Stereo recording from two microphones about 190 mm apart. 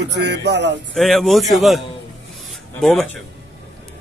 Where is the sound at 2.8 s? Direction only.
5° left (ahead or behind).